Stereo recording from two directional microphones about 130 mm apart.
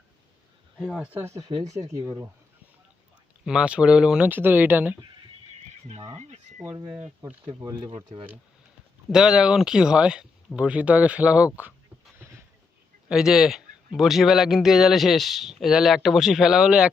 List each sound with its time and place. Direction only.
0.9 s speech: 15° right (ahead or behind)
1.5 s speech: 50° right (ahead or behind)
1.7 s speech: 25° right (ahead or behind)
3.4 s speech: 5° right (ahead or behind)
6.1 s speech: 60° right (ahead or behind)
7.2 s speech: 20° right (ahead or behind)
7.9 s speech: 45° right (ahead or behind)
9.0 s speech: 5° right (ahead or behind)
13.1 s a man's voice: 5° right (ahead or behind)